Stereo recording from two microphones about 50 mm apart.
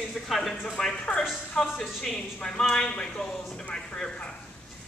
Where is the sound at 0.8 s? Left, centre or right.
Centre.